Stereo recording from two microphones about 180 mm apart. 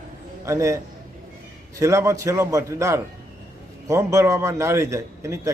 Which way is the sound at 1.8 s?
15° right (ahead or behind).